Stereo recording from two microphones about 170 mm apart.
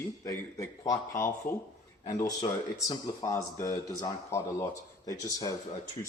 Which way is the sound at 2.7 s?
20° left (ahead or behind).